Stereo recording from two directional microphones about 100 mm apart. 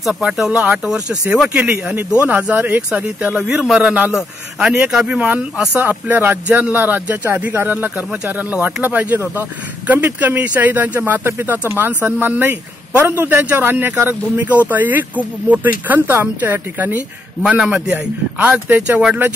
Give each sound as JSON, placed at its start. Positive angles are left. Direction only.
{"t": 0.0, "sound": "a man's voice", "side_deg": -5}